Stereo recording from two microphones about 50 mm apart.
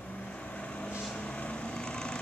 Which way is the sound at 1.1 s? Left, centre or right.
Left.